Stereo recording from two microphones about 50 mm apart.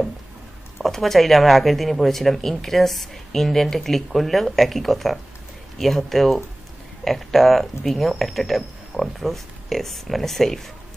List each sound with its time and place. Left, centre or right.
0.7 s speech: centre